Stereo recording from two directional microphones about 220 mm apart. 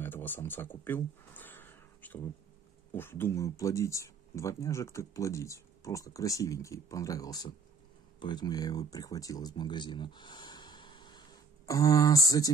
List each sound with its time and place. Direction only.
0.0 s speech: 10° left (ahead or behind)